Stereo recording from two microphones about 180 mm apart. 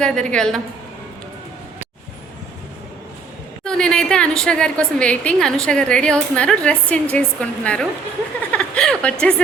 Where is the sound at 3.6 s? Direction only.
5° left (ahead or behind).